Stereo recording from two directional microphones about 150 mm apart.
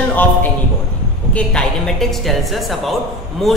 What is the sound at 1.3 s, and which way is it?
A woman's voice, 5° left (ahead or behind).